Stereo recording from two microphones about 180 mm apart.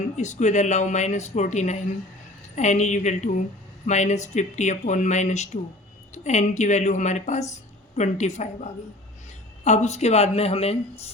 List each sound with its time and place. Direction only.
0.2 s a woman's voice: 40° left (ahead or behind)